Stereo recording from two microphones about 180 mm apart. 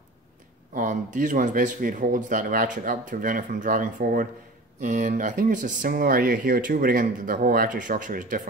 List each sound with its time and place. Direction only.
0.7 s speech: 45° right (ahead or behind)